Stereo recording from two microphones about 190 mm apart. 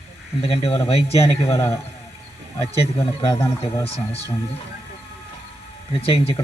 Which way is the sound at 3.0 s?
30° left (ahead or behind).